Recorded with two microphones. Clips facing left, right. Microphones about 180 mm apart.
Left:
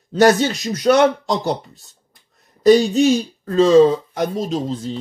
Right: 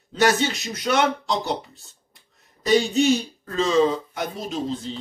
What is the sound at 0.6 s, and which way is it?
Speech, 40° left (ahead or behind).